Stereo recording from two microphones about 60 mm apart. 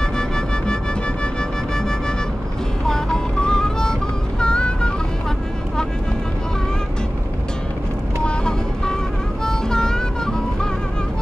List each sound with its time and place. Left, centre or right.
0.0 s music: centre
1.8 s music: centre
8.2 s vehicle: centre
9.4 s music: centre